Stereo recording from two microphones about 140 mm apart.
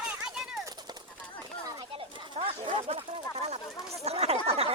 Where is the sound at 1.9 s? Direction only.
40° right (ahead or behind).